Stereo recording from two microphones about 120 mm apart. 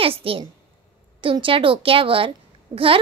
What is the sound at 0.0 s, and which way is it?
A child's voice, 50° right (ahead or behind).